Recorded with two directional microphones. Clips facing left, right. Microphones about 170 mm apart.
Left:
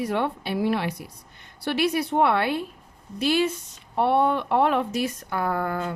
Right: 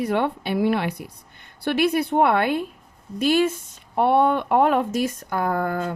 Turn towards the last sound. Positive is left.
turn(degrees=-45)  # may be behind; listen again after turning